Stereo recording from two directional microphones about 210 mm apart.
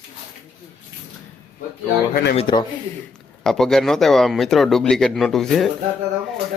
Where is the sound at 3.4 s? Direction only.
Centre (ahead or behind).